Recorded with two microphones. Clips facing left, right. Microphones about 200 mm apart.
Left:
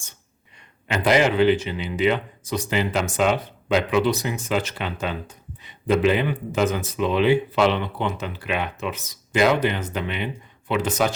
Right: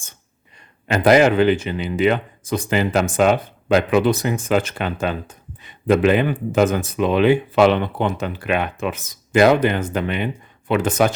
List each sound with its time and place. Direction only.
0.9 s speech: 45° right (ahead or behind)